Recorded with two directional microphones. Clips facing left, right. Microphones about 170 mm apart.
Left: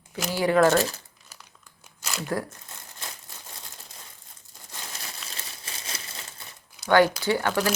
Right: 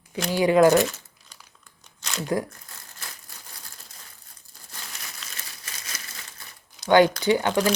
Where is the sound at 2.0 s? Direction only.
5° left (ahead or behind).